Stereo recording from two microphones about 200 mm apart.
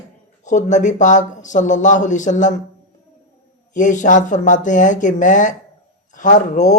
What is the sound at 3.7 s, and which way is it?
Speech, 40° left (ahead or behind).